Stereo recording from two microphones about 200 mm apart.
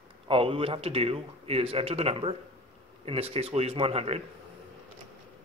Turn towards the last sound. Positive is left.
turn(degrees=-30)  # may be behind; listen again after turning